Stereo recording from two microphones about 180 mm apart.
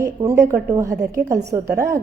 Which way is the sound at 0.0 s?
15° right (ahead or behind).